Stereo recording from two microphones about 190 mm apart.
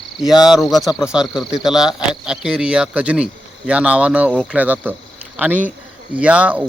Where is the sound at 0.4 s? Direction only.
Centre (ahead or behind).